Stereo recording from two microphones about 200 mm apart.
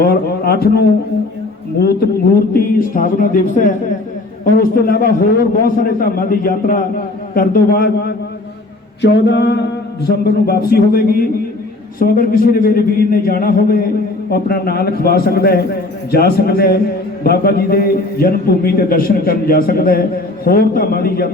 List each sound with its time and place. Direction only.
0.0 s speech: 50° left (ahead or behind)
1.8 s a man's voice: 50° left (ahead or behind)
9.0 s mantra: 60° left (ahead or behind)
10.1 s a man's voice: 50° left (ahead or behind)